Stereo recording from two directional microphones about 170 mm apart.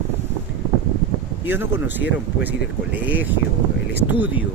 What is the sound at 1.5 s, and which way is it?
Speech, 10° right (ahead or behind).